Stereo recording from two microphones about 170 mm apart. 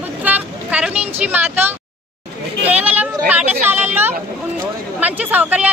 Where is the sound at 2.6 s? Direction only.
10° right (ahead or behind).